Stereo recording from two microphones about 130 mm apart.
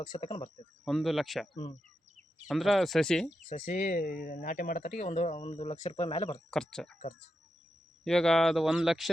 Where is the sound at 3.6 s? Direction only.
70° left (ahead or behind); by 6.3 s 50° left (ahead or behind).